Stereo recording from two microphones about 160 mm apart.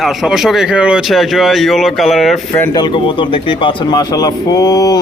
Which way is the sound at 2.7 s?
30° left (ahead or behind).